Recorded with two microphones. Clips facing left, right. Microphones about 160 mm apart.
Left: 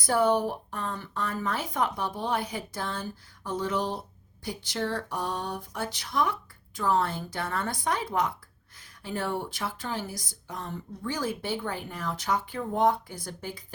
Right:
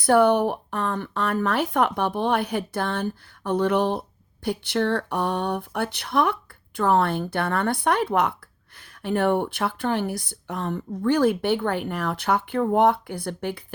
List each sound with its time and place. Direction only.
0.0 s speech: 65° right (ahead or behind)